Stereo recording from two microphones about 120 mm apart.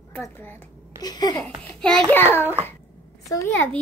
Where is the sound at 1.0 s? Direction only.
35° left (ahead or behind).